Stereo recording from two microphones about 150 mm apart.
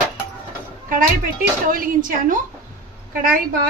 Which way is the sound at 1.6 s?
70° right (ahead or behind).